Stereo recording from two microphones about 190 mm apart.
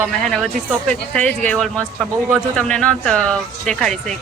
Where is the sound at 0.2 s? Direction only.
5° left (ahead or behind).